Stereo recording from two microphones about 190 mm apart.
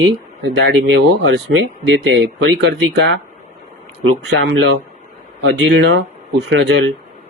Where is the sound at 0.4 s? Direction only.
65° right (ahead or behind).